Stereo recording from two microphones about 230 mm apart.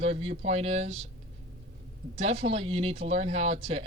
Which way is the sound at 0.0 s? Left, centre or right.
Right.